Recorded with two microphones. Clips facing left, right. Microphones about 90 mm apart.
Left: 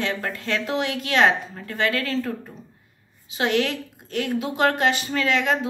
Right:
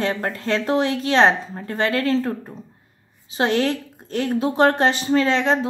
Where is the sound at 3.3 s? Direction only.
35° right (ahead or behind).